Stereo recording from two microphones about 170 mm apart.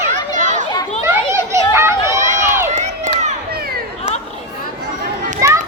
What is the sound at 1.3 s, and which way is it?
Children playing, 15° right (ahead or behind).